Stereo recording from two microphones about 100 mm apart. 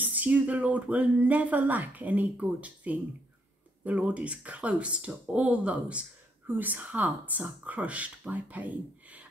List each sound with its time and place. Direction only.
0.0 s speech: 15° right (ahead or behind)